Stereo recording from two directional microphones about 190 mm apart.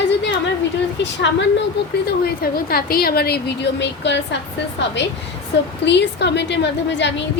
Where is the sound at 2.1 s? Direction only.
55° left (ahead or behind).